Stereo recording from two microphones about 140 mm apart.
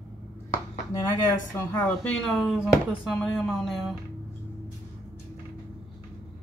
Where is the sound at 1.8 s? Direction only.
5° left (ahead or behind).